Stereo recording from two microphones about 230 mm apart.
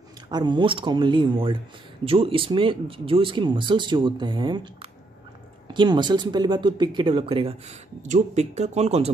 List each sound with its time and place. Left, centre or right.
0.3 s speech: centre
5.7 s speech: centre